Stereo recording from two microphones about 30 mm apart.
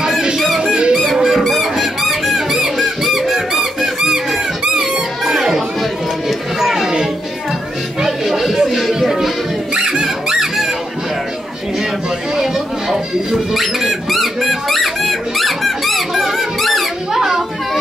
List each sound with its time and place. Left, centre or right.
0.6 s music: right
1.1 s a sound: centre
1.4 s squeak: centre
5.3 s a sound: centre
8.3 s a sound: centre
9.8 s music: right
10.3 s squeak: centre
12.4 s rodents: centre
13.6 s squeak: centre